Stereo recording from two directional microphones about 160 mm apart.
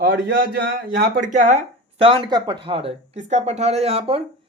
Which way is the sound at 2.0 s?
30° right (ahead or behind).